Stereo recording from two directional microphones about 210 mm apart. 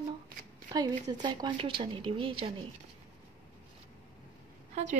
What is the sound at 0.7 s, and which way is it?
Speech, 20° right (ahead or behind).